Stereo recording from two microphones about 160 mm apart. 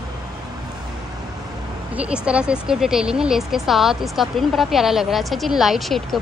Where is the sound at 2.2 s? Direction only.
5° right (ahead or behind).